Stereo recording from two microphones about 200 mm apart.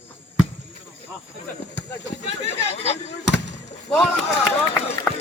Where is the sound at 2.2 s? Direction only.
30° left (ahead or behind).